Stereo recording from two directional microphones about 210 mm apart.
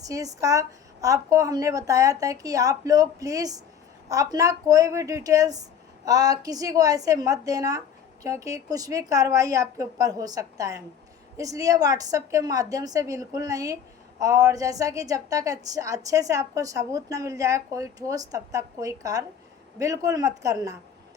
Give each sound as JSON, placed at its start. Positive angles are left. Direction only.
{"t": 0.0, "sound": "a woman's voice", "side_deg": -15}